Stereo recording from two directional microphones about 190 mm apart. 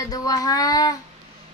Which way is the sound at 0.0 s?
20° left (ahead or behind).